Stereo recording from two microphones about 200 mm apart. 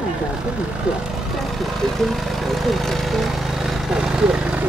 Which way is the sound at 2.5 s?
Centre (ahead or behind).